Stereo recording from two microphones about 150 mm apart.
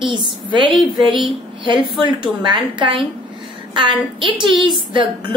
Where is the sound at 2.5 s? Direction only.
30° right (ahead or behind).